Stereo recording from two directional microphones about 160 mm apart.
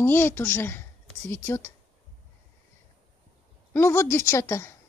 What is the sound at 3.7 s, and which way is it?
Speech, 15° left (ahead or behind).